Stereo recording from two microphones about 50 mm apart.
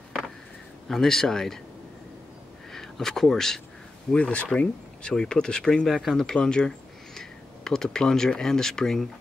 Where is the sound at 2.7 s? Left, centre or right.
Centre.